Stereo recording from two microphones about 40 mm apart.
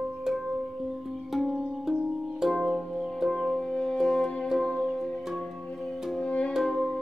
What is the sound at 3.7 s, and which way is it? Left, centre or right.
Music, centre.